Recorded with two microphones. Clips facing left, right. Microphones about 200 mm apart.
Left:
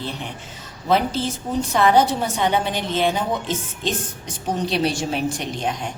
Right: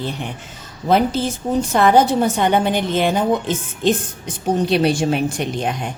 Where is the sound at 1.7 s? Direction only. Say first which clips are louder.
Right 3 dB; 50° right (ahead or behind).